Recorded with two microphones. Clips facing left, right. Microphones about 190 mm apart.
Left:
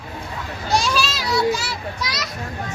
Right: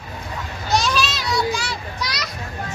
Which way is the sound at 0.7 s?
10° left (ahead or behind).